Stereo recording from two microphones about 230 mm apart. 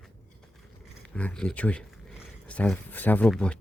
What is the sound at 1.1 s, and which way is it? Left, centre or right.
Speech, centre.